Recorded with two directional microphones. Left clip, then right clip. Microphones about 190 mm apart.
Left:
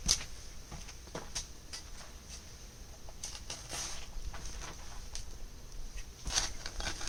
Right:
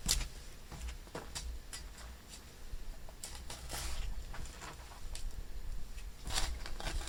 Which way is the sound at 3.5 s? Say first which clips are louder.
Left 3 dB; centre (ahead or behind).